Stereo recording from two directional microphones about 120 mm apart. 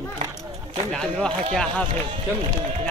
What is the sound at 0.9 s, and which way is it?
Speech, 5° left (ahead or behind).